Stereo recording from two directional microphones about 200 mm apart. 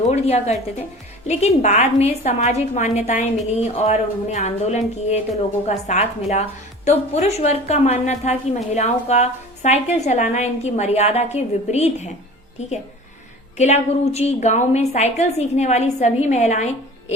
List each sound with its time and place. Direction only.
0.1 s a woman's voice: 35° left (ahead or behind)